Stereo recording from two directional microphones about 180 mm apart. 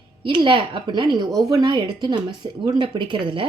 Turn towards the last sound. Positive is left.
turn(degrees=-30)  # may be behind; listen again after turning